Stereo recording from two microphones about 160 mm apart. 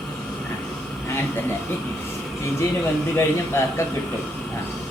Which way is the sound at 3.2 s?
15° left (ahead or behind).